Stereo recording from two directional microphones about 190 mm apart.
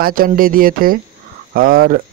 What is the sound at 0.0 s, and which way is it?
Speech, 50° right (ahead or behind).